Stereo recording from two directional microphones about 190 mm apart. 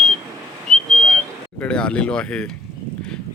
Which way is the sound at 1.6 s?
5° left (ahead or behind).